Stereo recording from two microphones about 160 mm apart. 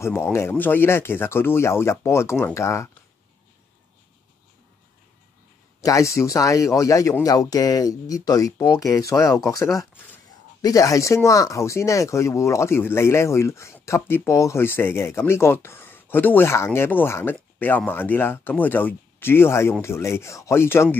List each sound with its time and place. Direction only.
0.0 s speech: 15° left (ahead or behind)
5.8 s speech: 20° left (ahead or behind)